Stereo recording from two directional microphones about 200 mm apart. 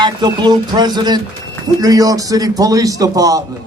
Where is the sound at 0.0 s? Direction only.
20° right (ahead or behind).